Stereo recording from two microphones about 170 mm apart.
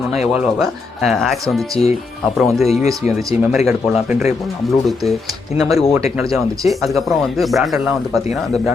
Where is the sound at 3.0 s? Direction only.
45° left (ahead or behind).